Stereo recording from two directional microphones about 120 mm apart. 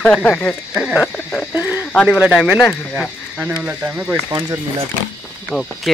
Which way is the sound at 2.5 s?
20° left (ahead or behind).